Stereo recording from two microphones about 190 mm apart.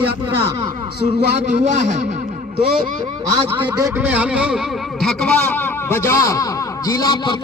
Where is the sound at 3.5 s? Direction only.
15° right (ahead or behind).